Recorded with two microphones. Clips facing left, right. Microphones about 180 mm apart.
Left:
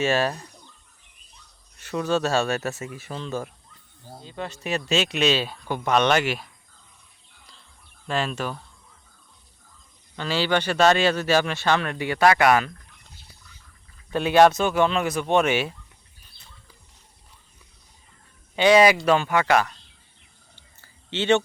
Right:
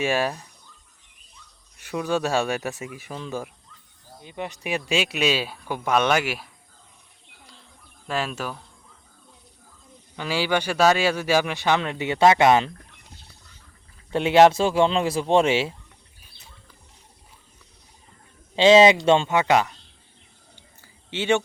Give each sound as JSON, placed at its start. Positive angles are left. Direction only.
{"t": 0.0, "sound": "a man's voice", "side_deg": -10}
{"t": 1.8, "sound": "a man's voice", "side_deg": -10}
{"t": 8.0, "sound": "a man's voice", "side_deg": -5}
{"t": 10.2, "sound": "a man's voice", "side_deg": -10}
{"t": 14.1, "sound": "speech", "side_deg": -25}
{"t": 18.5, "sound": "speech", "side_deg": -25}
{"t": 20.8, "sound": "a sound", "side_deg": -10}